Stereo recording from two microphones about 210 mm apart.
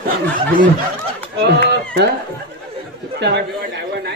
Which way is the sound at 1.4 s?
50° right (ahead or behind).